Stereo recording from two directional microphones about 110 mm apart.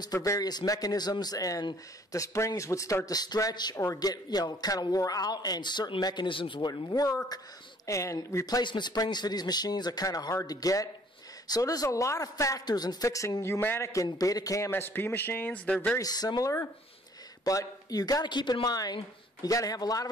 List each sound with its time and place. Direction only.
0.0 s a man's voice: 30° left (ahead or behind); by 6.7 s 50° left (ahead or behind)
6.7 s a man's voice: 35° left (ahead or behind)
14.7 s speech: 20° left (ahead or behind)
16.0 s a man's voice: 35° left (ahead or behind)